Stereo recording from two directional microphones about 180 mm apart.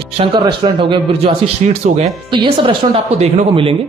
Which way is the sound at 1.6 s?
40° right (ahead or behind).